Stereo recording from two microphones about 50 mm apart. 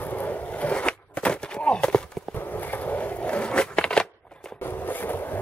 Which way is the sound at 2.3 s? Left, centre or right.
Left.